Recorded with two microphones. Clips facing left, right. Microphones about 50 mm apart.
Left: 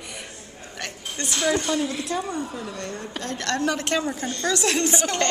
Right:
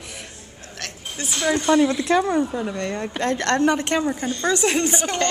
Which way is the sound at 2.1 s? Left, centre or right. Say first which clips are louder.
Right 9 dB; right.